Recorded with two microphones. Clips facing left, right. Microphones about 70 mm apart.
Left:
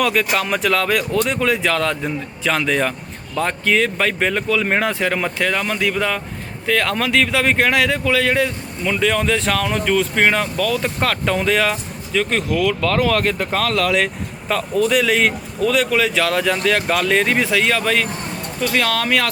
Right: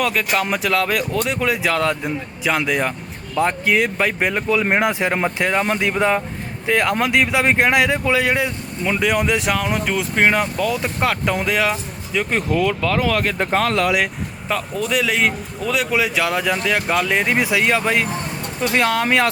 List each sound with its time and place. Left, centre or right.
0.0 s speech: centre
12.5 s speech: right
12.8 s speech: centre
13.4 s speech: right